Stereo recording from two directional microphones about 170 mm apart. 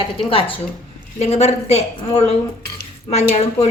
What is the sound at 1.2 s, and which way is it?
A woman's voice, 40° left (ahead or behind).